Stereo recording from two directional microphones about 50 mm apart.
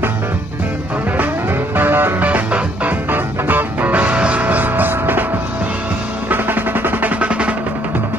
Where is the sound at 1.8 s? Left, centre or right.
Right.